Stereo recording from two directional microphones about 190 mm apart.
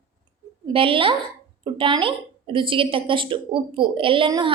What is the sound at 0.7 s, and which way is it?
A woman's voice, 30° right (ahead or behind).